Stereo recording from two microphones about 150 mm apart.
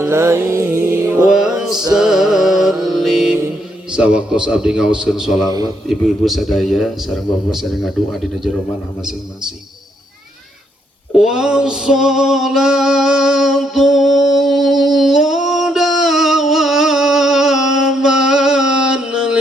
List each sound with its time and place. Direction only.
0.0 s music: 20° right (ahead or behind)
1.3 s music: 5° right (ahead or behind)
2.0 s mantra: centre (ahead or behind)
3.9 s a man's voice: 5° right (ahead or behind)
11.1 s music: 5° right (ahead or behind)